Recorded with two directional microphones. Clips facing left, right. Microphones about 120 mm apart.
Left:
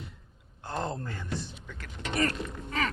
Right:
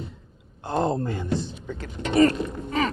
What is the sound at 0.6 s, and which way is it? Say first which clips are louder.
Speech: right 9 dB; 20° right (ahead or behind).